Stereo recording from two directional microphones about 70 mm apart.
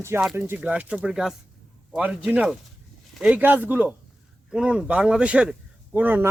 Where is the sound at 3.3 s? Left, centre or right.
Right.